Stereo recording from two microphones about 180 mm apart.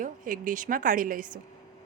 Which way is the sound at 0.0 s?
45° right (ahead or behind).